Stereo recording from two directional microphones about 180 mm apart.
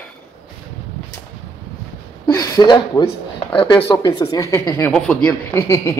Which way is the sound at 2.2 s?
20° left (ahead or behind).